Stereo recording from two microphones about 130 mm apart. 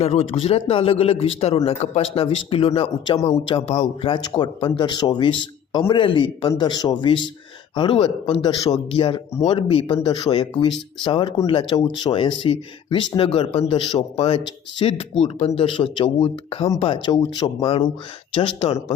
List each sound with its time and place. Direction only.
0.0 s speech: 50° left (ahead or behind)
14.8 s speech: 50° left (ahead or behind)